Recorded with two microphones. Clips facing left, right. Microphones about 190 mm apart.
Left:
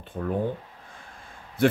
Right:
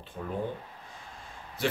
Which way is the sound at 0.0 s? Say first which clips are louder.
Left 7 dB; 55° left (ahead or behind).